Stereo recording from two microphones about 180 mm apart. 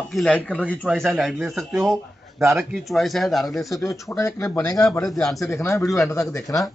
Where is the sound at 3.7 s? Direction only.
15° left (ahead or behind).